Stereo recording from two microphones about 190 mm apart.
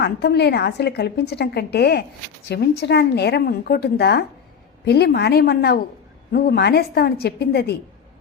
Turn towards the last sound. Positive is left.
turn(degrees=60)  # may be behind; listen again after turning